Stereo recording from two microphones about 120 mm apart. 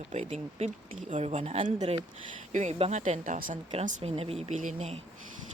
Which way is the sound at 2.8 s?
75° right (ahead or behind).